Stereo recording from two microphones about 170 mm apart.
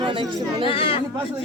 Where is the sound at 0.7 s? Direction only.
35° left (ahead or behind).